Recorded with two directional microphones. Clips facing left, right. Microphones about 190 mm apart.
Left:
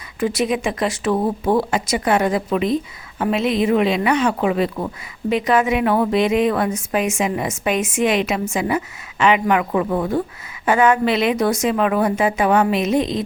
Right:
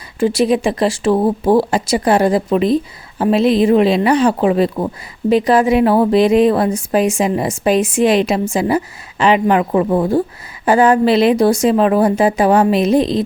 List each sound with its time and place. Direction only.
0.2 s a woman's voice: 30° right (ahead or behind)